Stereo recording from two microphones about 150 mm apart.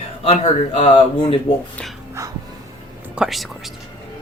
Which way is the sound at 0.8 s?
35° left (ahead or behind).